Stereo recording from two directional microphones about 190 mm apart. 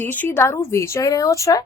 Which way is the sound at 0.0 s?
10° left (ahead or behind).